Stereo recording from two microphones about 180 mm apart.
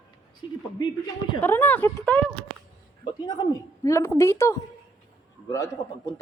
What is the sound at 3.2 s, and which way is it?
A woman's voice, 20° left (ahead or behind).